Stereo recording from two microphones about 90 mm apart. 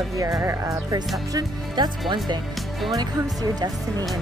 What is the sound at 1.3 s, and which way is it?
Speech, 50° right (ahead or behind).